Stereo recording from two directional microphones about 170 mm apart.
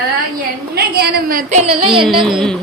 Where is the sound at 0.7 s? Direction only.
65° right (ahead or behind).